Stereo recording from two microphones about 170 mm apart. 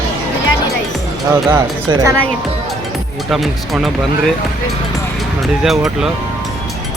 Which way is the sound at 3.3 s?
Centre (ahead or behind).